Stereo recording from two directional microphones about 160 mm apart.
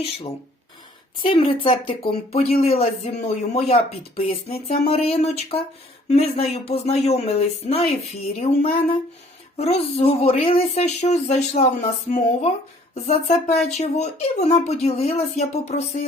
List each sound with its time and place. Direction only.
1.2 s a woman's voice: 35° left (ahead or behind)